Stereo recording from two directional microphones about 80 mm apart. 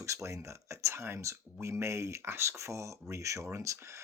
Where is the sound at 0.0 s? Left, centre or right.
Right.